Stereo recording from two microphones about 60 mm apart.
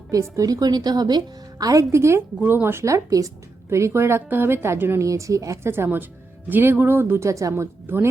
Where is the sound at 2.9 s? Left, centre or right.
Right.